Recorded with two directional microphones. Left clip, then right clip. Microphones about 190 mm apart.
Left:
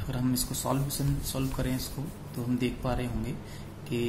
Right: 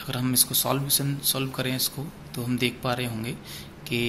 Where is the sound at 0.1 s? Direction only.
10° right (ahead or behind).